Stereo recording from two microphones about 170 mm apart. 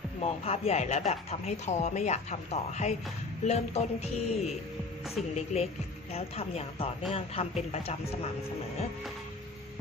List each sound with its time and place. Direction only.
0.2 s speech: 35° left (ahead or behind)